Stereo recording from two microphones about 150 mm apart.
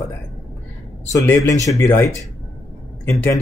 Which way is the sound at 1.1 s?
20° left (ahead or behind).